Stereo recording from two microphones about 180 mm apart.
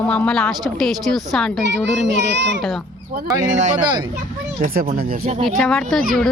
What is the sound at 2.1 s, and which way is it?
Speech, 75° right (ahead or behind).